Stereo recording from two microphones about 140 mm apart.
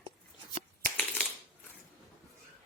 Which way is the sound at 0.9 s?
10° left (ahead or behind).